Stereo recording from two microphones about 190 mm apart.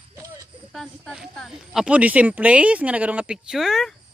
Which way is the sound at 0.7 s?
Centre (ahead or behind).